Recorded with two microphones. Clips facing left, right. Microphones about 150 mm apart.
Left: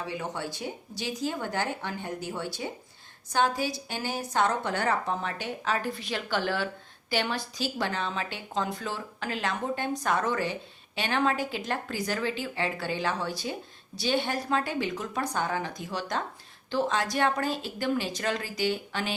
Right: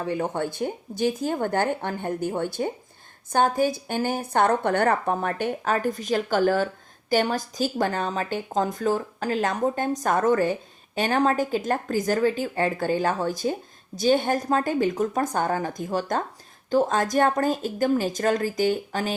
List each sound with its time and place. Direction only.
0.0 s speech: 50° right (ahead or behind)